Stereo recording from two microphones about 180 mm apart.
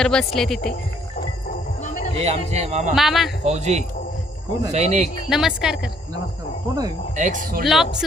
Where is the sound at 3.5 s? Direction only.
40° right (ahead or behind).